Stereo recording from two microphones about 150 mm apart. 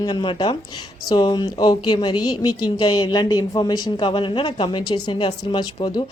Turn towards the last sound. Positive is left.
turn(degrees=30)  # may be behind; listen again after turning